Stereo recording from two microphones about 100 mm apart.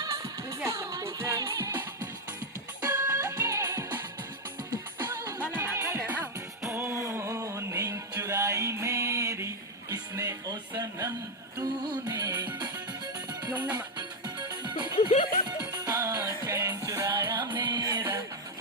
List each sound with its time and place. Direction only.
0.6 s music: 30° right (ahead or behind)
2.8 s music: 20° right (ahead or behind)
6.7 s a sound: 20° right (ahead or behind)
7.0 s music: 30° right (ahead or behind); by 12.7 s 45° right (ahead or behind)
14.3 s music: 45° right (ahead or behind)
14.9 s music: 70° left (ahead or behind)
15.6 s music: 35° right (ahead or behind)
17.3 s music: 50° right (ahead or behind)
18.0 s music: 35° right (ahead or behind)